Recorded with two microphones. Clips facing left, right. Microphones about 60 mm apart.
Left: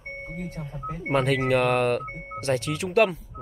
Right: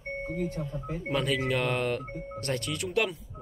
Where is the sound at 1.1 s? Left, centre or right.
Left.